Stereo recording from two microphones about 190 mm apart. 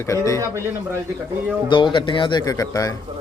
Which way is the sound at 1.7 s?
25° left (ahead or behind).